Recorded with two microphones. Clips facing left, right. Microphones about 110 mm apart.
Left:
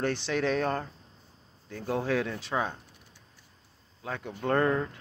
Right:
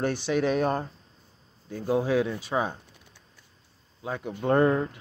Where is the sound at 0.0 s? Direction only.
10° right (ahead or behind).